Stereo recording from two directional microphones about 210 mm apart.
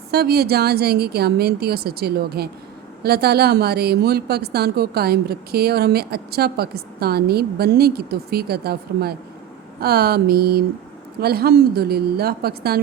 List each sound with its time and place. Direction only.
0.1 s a woman's voice: 50° right (ahead or behind)